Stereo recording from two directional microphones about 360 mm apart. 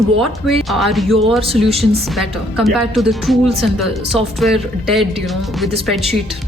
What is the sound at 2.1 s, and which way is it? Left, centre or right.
Speech, centre.